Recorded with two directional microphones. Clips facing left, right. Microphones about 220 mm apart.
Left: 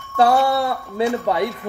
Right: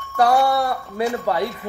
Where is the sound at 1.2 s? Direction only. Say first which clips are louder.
Left 2 dB; 20° left (ahead or behind).